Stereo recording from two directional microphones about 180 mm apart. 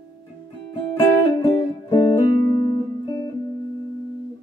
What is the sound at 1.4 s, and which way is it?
Music, 20° left (ahead or behind).